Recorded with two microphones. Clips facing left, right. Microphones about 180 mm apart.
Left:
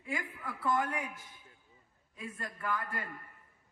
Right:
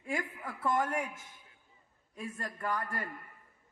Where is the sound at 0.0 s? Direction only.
50° right (ahead or behind).